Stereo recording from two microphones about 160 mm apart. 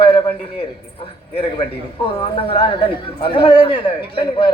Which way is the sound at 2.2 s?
35° left (ahead or behind).